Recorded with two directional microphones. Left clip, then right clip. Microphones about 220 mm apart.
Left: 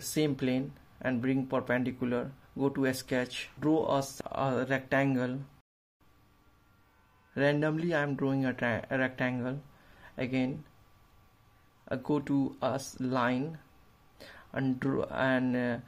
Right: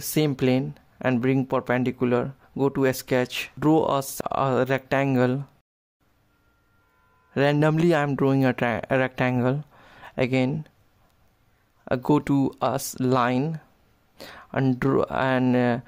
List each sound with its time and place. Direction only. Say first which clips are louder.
0.1 s speech: right 8 dB; 40° right (ahead or behind)
7.3 s speech: right 7 dB; 45° right (ahead or behind)
11.8 s speech: right 10 dB; 45° right (ahead or behind)